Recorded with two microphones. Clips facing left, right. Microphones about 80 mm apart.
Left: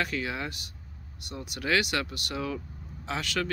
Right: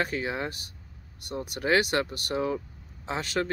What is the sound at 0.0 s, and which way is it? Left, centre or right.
Speech, right.